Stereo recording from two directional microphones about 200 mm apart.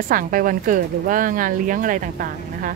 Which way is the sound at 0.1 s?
45° right (ahead or behind).